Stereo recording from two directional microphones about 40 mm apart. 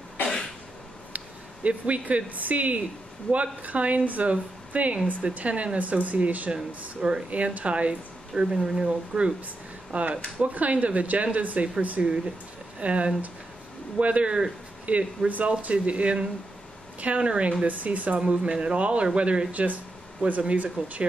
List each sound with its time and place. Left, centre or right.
1.1 s speech: right
7.0 s speech: right
7.2 s speech: right
8.4 s speech: centre
8.8 s speech: right
9.9 s speech: right